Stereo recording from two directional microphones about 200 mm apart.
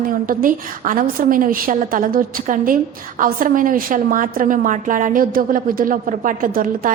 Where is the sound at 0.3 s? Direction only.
45° right (ahead or behind).